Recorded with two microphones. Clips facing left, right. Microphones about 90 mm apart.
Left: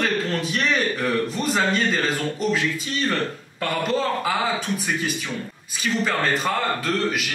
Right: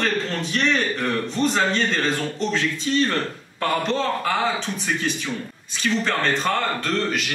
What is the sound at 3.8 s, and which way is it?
Speech, 5° left (ahead or behind).